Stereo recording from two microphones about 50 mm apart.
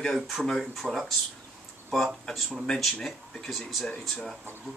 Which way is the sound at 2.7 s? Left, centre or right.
Centre.